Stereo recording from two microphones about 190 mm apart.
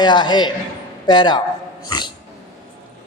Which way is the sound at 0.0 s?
25° left (ahead or behind).